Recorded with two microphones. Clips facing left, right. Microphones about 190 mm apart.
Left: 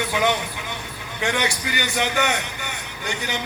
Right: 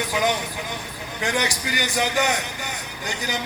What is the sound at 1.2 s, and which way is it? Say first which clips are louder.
A man's voice: left 1 dB; 35° right (ahead or behind).